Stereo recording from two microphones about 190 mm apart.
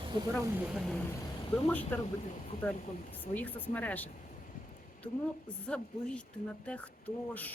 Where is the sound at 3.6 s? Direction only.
10° left (ahead or behind).